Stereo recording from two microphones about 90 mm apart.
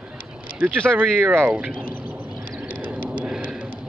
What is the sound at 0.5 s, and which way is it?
Speech, 20° right (ahead or behind).